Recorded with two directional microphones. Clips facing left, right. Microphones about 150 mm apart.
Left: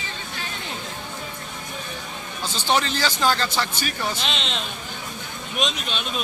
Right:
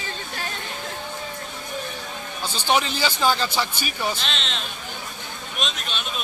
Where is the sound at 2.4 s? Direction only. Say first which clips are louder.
Even; 10° right (ahead or behind).